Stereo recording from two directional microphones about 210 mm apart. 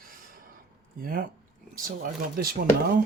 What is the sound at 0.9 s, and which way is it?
Speech, 45° right (ahead or behind).